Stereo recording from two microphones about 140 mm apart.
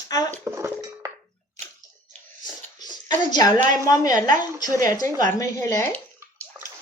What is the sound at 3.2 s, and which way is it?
A woman's voice, 30° left (ahead or behind).